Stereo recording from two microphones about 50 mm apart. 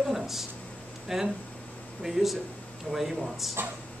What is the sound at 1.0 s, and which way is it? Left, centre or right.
A woman's voice, centre.